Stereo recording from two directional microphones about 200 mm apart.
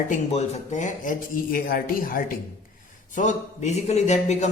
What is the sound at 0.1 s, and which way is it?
A man's voice, 35° left (ahead or behind).